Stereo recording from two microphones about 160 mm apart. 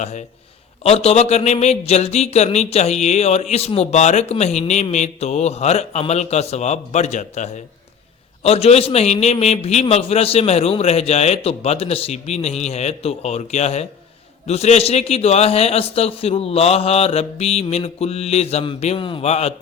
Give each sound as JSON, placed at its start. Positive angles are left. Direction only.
{"t": 0.0, "sound": "a man's voice", "side_deg": 45}